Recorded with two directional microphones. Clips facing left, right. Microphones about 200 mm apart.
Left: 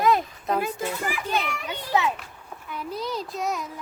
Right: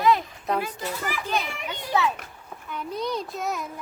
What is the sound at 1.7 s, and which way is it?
Speech, 20° left (ahead or behind).